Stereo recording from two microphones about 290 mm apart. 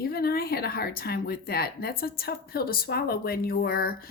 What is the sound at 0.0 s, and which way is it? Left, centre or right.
Speech, left.